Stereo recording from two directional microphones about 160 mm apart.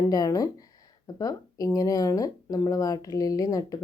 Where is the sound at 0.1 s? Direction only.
25° left (ahead or behind).